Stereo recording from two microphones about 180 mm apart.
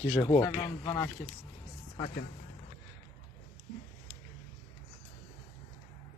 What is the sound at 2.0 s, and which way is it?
Speech, 50° left (ahead or behind).